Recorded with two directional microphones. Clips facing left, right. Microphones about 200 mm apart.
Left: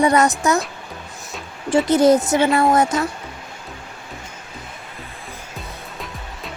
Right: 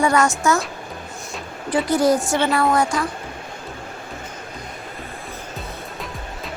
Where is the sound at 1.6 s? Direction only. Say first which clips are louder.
Left 4 dB; 25° left (ahead or behind).